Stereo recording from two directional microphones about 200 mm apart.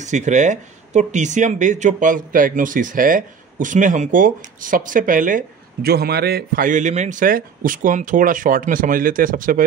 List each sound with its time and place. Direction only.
0.0 s speech: 35° right (ahead or behind)